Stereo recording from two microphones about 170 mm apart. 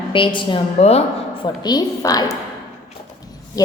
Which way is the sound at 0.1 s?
30° left (ahead or behind).